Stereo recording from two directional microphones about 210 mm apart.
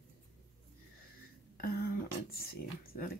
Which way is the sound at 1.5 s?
45° left (ahead or behind).